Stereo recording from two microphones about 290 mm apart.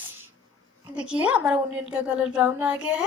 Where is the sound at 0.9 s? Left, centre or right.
Centre.